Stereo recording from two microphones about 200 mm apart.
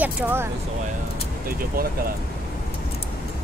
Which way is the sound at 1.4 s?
45° right (ahead or behind).